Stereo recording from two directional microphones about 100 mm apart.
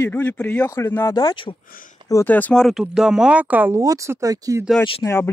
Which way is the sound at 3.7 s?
30° right (ahead or behind).